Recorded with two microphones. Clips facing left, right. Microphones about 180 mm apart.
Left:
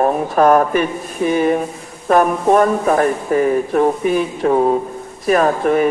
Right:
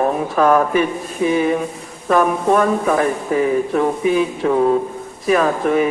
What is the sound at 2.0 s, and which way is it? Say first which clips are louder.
Speech: left 2 dB; 45° left (ahead or behind).